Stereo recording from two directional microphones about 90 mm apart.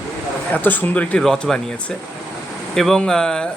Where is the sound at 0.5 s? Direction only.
20° left (ahead or behind).